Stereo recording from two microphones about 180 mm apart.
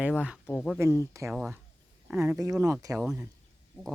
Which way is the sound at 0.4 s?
5° left (ahead or behind).